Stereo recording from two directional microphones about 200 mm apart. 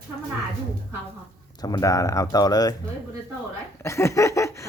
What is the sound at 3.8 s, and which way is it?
Laughter, 15° left (ahead or behind).